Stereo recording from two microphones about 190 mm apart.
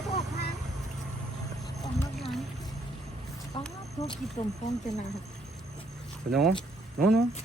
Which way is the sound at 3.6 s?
30° left (ahead or behind).